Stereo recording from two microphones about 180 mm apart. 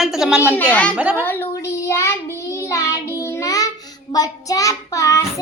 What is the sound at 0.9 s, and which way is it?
Speech, 5° right (ahead or behind).